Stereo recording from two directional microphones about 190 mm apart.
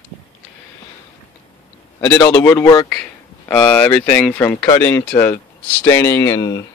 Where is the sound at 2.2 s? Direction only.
20° left (ahead or behind).